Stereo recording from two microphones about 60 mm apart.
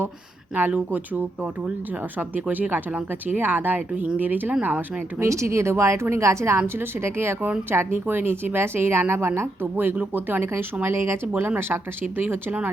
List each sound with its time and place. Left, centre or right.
0.5 s speech: right
2.1 s speech: right
5.2 s a woman's voice: right
6.6 s a woman's voice: right
10.8 s a woman's voice: right
11.3 s speech: right